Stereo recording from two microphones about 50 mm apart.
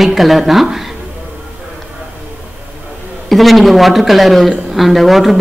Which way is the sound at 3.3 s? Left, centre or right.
Centre.